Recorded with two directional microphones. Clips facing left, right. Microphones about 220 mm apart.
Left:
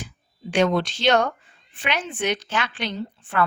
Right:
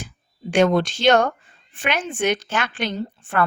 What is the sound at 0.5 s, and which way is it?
A woman's voice, 50° right (ahead or behind).